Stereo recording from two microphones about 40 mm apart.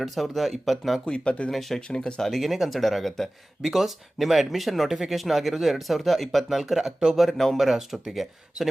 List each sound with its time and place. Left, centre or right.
0.0 s speech: centre
1.0 s speech: left
1.5 s speech: centre
7.3 s speech: centre